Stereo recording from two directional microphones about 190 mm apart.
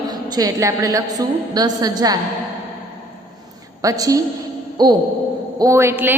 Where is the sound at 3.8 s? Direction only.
20° right (ahead or behind).